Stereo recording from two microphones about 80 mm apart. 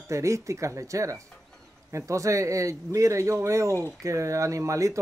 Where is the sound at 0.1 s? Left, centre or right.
Right.